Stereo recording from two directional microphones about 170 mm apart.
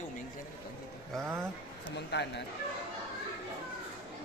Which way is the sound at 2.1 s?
90° left.